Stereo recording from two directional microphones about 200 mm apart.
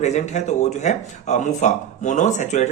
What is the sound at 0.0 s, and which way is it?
Speech, 35° left (ahead or behind).